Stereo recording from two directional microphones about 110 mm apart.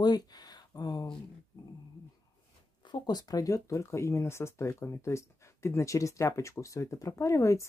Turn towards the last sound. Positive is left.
turn(degrees=25)  # may be behind; listen again after turning